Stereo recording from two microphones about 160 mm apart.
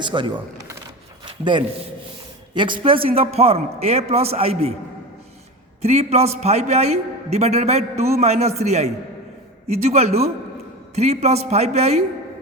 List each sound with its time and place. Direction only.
0.0 s speech: 30° right (ahead or behind)
1.2 s a sound: 30° right (ahead or behind)
2.6 s a man's voice: 30° right (ahead or behind)
5.8 s a man's voice: 40° right (ahead or behind)